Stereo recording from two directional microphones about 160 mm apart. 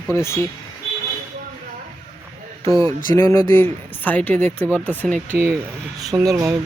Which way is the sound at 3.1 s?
20° left (ahead or behind).